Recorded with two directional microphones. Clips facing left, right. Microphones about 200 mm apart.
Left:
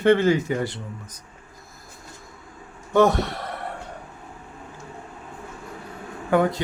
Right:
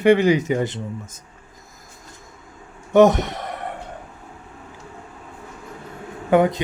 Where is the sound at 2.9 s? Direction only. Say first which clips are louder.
Right 4 dB; 20° right (ahead or behind).